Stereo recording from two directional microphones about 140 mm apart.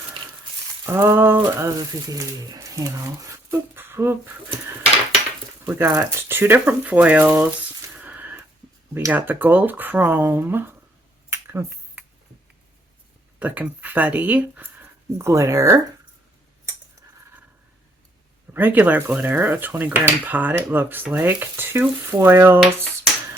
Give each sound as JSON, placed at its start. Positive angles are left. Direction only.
{"t": 0.9, "sound": "speech", "side_deg": -15}
{"t": 5.6, "sound": "speech", "side_deg": -15}
{"t": 7.9, "sound": "a sound", "side_deg": -10}
{"t": 9.0, "sound": "speech", "side_deg": -15}
{"t": 11.3, "sound": "a sound", "side_deg": -20}
{"t": 13.4, "sound": "speech", "side_deg": -10}
{"t": 18.5, "sound": "speech", "side_deg": -15}